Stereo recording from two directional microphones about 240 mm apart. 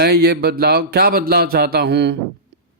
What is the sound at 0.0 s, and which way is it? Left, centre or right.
Speech, right.